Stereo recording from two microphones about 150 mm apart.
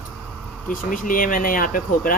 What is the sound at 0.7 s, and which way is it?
Speech, 65° left (ahead or behind).